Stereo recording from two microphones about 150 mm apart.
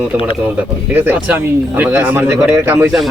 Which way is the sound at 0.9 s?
10° right (ahead or behind).